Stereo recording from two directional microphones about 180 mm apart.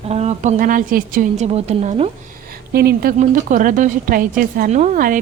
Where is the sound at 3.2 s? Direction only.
45° right (ahead or behind).